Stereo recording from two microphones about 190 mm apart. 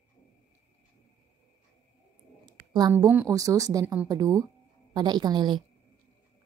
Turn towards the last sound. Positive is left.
turn(degrees=-25)  # may be behind; listen again after turning